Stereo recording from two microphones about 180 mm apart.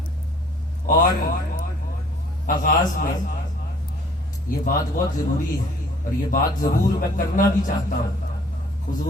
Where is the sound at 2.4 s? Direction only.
50° left (ahead or behind).